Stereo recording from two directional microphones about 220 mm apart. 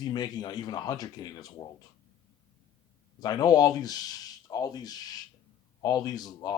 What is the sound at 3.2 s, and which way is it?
Speech, 15° left (ahead or behind).